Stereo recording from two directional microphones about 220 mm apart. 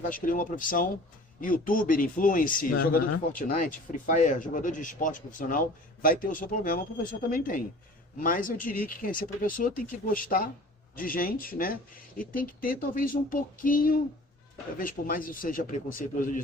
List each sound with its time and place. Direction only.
0.1 s speech: 40° left (ahead or behind)